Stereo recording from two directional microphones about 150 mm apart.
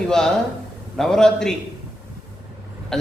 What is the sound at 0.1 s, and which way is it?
A man's voice, 5° left (ahead or behind).